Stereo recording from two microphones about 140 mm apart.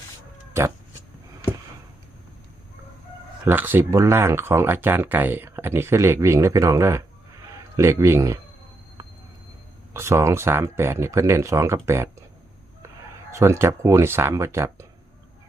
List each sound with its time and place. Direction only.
0.6 s speech: 20° right (ahead or behind)
3.4 s speech: 15° right (ahead or behind)
9.9 s speech: 20° right (ahead or behind)
13.3 s speech: 20° right (ahead or behind)